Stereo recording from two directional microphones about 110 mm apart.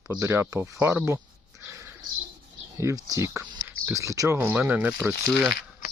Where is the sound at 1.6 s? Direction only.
25° right (ahead or behind).